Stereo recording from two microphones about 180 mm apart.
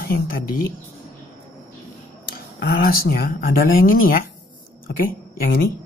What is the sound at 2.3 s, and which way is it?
Speech, 55° left (ahead or behind).